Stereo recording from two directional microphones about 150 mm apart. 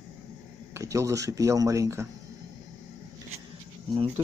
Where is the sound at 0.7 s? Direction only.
20° right (ahead or behind).